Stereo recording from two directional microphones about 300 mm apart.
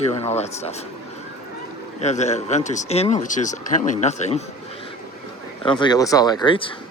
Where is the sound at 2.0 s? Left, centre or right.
Left.